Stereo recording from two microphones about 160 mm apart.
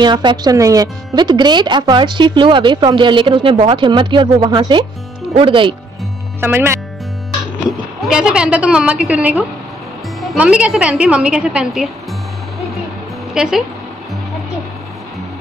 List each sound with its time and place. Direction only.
0.0 s speech: 30° right (ahead or behind)
6.4 s a woman's voice: 15° right (ahead or behind)
8.0 s a woman's voice: 5° right (ahead or behind)
13.3 s speech: 5° right (ahead or behind)